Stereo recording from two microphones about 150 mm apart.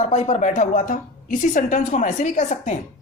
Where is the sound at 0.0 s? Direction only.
45° left (ahead or behind).